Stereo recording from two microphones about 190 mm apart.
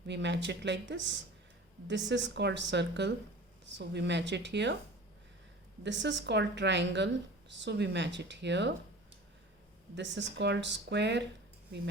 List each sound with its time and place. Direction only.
0.1 s a woman's voice: 65° right (ahead or behind)
2.0 s a woman's voice: 70° right (ahead or behind)
5.8 s a woman's voice: 70° right (ahead or behind)
9.9 s a woman's voice: 70° right (ahead or behind)